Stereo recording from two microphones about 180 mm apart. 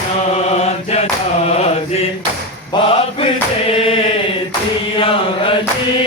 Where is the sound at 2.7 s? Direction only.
30° left (ahead or behind).